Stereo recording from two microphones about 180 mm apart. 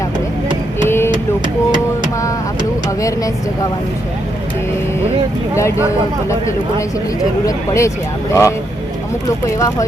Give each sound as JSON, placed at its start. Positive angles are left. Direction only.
{"t": 0.9, "sound": "vehicle", "side_deg": 15}
{"t": 5.5, "sound": "speech", "side_deg": 15}
{"t": 7.4, "sound": "speech", "side_deg": 15}
{"t": 9.6, "sound": "speech", "side_deg": 20}